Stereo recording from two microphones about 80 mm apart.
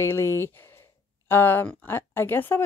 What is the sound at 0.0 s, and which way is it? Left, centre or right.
Speech, left.